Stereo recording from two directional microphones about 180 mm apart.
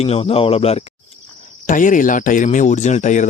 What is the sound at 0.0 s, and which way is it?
Speech, 35° left (ahead or behind).